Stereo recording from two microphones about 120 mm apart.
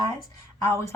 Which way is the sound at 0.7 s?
25° left (ahead or behind).